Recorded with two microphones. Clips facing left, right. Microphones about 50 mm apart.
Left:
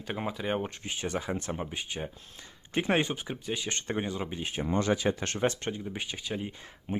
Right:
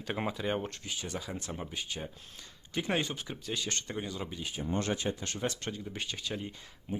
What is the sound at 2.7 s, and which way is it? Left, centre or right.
Speech, left.